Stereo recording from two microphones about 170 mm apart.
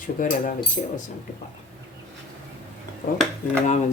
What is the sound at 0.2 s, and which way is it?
Speech, 55° left (ahead or behind).